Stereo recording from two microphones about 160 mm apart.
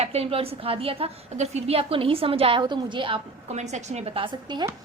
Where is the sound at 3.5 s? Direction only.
45° right (ahead or behind); by 4.7 s 25° right (ahead or behind).